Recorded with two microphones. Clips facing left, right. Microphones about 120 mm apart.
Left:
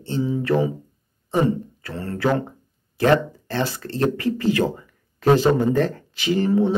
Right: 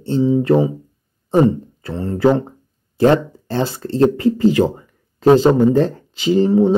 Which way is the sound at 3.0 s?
30° right (ahead or behind).